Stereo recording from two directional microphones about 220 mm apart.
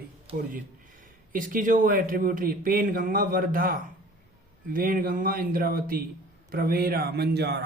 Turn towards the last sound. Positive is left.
turn(degrees=-50)  # may be behind; listen again after turning